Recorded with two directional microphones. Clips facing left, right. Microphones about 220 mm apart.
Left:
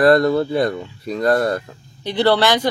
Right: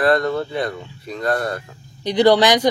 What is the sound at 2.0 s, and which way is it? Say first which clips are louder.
Speech: right 2 dB; 15° right (ahead or behind).